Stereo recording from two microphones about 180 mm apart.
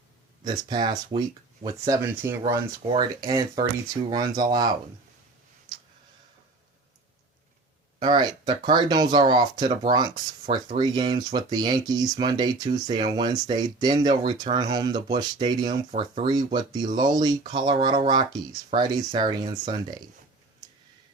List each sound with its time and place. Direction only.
0.4 s speech: 25° right (ahead or behind)
7.9 s speech: 25° right (ahead or behind)